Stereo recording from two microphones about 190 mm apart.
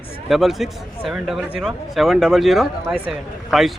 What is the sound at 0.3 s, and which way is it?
Speech, centre (ahead or behind).